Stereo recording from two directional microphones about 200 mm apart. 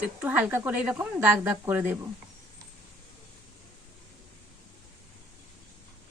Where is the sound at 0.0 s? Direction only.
5° right (ahead or behind).